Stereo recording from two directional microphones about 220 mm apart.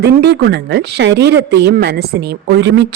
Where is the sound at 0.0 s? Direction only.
50° right (ahead or behind).